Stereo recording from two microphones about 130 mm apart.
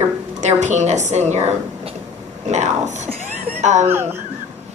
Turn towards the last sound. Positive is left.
turn(degrees=-20)  # may be behind; listen again after turning